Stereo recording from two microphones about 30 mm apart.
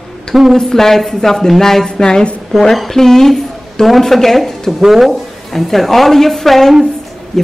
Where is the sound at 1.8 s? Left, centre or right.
Left.